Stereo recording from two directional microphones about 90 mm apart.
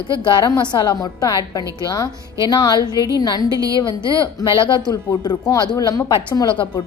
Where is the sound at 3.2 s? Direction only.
50° left (ahead or behind).